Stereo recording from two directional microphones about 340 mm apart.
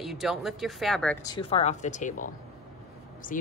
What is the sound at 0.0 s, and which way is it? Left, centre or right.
A woman's voice, centre.